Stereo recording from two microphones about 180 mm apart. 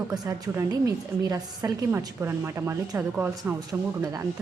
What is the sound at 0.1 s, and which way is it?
A woman's voice, 20° right (ahead or behind).